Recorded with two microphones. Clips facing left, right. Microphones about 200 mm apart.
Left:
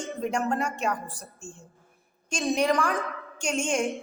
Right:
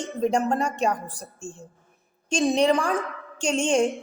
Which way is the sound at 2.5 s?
30° right (ahead or behind).